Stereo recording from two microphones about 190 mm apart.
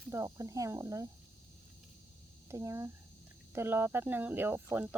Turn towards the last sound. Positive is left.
turn(degrees=-10)  # may be behind; listen again after turning